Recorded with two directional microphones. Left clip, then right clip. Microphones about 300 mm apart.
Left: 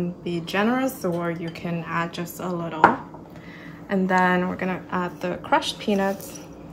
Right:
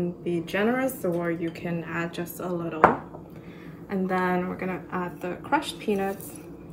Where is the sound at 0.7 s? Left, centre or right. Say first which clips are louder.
Left 2 dB; left.